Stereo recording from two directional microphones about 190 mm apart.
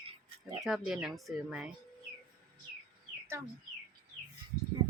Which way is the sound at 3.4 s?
15° right (ahead or behind).